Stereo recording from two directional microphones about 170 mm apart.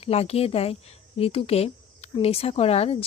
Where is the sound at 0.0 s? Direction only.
35° left (ahead or behind).